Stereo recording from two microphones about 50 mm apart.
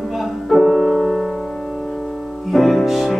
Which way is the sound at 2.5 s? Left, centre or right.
Centre.